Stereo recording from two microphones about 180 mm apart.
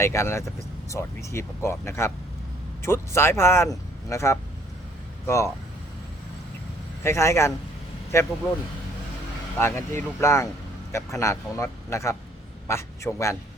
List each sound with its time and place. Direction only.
0.0 s speech: 15° left (ahead or behind)
7.0 s speech: 15° left (ahead or behind)
9.6 s a man's voice: 15° left (ahead or behind)